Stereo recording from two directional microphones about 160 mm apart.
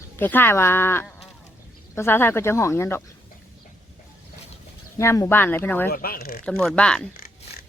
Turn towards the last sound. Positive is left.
turn(degrees=5)  # may be behind; listen again after turning